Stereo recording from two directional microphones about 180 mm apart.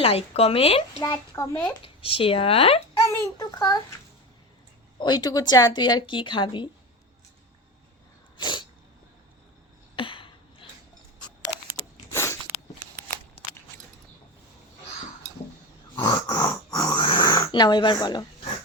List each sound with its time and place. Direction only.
0.0 s speech: 30° left (ahead or behind)
0.9 s a child's voice: 15° left (ahead or behind)
1.8 s speech: 30° left (ahead or behind)
3.2 s a woman's voice: 20° left (ahead or behind)
4.9 s a woman's voice: 25° left (ahead or behind)
8.4 s sneeze: 25° left (ahead or behind)
9.9 s a sound: 30° left (ahead or behind)
11.8 s a sound: 15° left (ahead or behind)
16.0 s a sound: 20° left (ahead or behind)